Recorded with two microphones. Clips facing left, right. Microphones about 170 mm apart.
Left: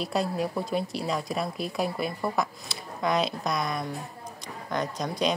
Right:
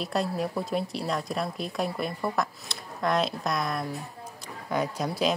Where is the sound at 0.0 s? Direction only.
Centre (ahead or behind).